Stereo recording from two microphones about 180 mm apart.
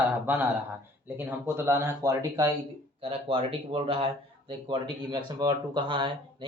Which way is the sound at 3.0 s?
30° right (ahead or behind).